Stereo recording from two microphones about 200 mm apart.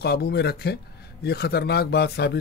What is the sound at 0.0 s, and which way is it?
Speech, 55° left (ahead or behind).